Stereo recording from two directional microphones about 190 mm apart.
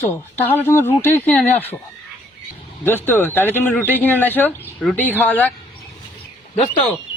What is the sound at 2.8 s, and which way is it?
Speech, 10° left (ahead or behind).